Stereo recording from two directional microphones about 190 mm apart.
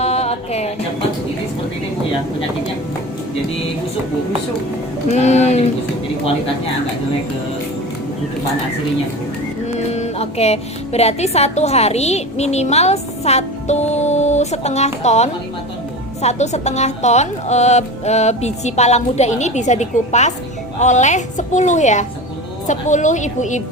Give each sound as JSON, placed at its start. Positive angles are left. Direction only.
{"t": 0.0, "sound": "a sound", "side_deg": 35}
{"t": 5.0, "sound": "speech", "side_deg": 35}
{"t": 9.7, "sound": "speech", "side_deg": 35}